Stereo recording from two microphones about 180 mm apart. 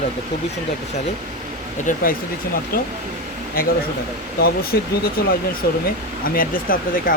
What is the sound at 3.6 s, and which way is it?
Speech, 55° left (ahead or behind).